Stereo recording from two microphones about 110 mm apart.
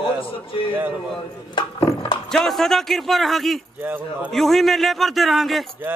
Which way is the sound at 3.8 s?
15° right (ahead or behind).